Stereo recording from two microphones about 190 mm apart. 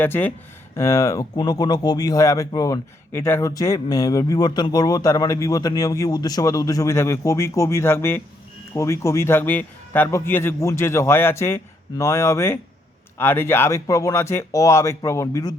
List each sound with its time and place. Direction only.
0.0 s speech: 10° left (ahead or behind)